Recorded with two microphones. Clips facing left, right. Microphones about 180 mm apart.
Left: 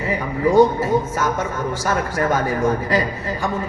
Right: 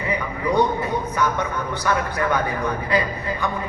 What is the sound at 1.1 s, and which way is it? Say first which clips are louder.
Speech: left 1 dB; 40° left (ahead or behind).